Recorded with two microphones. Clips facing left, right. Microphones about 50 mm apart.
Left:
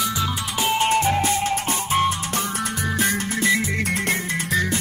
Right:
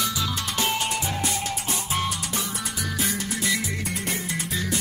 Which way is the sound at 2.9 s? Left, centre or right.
Left.